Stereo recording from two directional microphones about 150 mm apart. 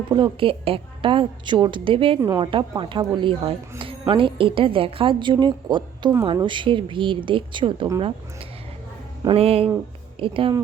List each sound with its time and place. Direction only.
0.1 s a woman's voice: 35° right (ahead or behind)
9.2 s a woman's voice: 40° right (ahead or behind)